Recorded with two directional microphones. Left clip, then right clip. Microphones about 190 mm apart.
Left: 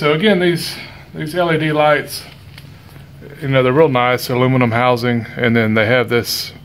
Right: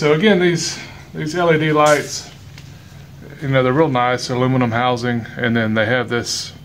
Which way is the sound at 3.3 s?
30° left (ahead or behind).